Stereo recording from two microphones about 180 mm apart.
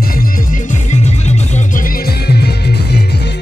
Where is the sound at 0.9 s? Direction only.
40° left (ahead or behind); by 3.0 s 65° left (ahead or behind).